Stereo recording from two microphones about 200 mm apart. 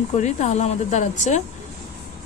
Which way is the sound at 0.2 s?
35° left (ahead or behind).